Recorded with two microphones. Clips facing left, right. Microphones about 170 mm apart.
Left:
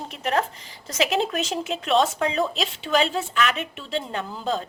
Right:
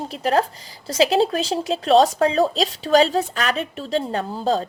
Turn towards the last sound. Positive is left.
turn(degrees=-35)  # may be behind; listen again after turning